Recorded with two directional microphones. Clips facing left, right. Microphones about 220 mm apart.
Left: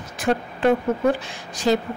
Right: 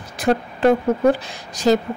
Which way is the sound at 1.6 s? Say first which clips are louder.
Right 4 dB; 40° right (ahead or behind).